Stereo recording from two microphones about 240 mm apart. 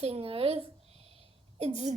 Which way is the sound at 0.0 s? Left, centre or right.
Right.